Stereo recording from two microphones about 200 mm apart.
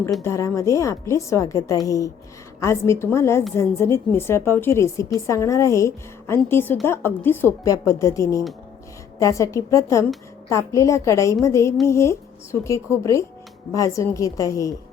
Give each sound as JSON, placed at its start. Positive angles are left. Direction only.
{"t": 0.2, "sound": "a woman's voice", "side_deg": 15}